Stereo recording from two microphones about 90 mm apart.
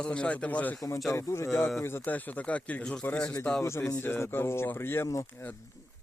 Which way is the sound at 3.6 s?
30° left (ahead or behind).